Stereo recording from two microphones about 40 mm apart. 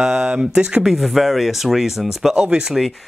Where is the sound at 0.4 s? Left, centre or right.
Right.